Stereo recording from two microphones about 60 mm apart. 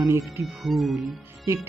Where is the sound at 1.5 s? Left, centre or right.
Right.